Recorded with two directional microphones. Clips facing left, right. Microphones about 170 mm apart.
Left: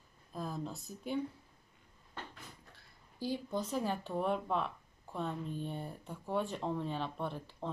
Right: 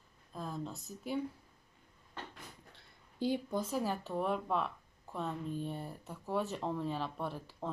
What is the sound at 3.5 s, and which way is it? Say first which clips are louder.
Speech: even; 5° right (ahead or behind).